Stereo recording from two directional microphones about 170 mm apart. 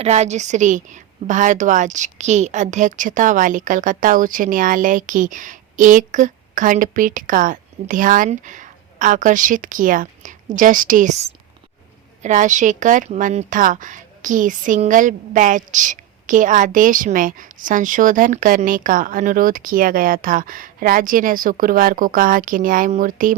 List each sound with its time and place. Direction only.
0.0 s a woman's voice: 40° right (ahead or behind)